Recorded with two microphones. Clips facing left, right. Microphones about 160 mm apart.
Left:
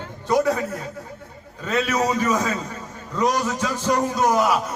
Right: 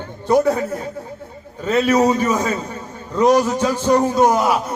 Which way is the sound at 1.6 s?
30° right (ahead or behind).